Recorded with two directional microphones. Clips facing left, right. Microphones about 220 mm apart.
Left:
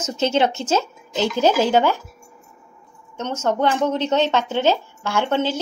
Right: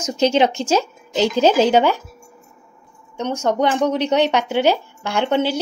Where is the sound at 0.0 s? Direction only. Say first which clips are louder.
Right 3 dB; 15° right (ahead or behind).